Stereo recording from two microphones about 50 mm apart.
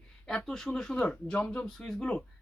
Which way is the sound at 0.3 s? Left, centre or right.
Centre.